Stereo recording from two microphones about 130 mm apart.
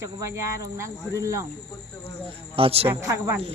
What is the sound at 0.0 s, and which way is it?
Speech, 20° right (ahead or behind).